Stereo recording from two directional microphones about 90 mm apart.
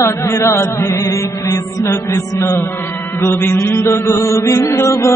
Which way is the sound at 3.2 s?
30° left (ahead or behind).